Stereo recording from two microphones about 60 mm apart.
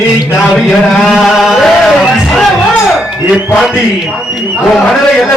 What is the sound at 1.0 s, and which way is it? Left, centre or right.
Chant, centre.